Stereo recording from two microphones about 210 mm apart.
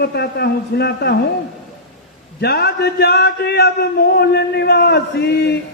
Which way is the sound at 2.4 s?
50° left (ahead or behind).